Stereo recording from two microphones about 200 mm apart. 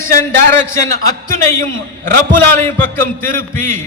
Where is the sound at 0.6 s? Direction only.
15° left (ahead or behind).